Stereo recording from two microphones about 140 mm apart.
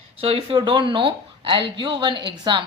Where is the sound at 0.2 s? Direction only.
40° right (ahead or behind).